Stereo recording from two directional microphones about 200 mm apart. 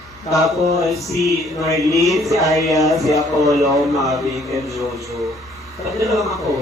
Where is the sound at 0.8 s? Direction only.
Centre (ahead or behind).